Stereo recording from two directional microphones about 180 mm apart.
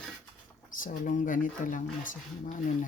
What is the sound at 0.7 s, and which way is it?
Speech, 45° left (ahead or behind).